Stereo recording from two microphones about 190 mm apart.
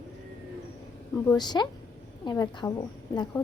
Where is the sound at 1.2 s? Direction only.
20° left (ahead or behind).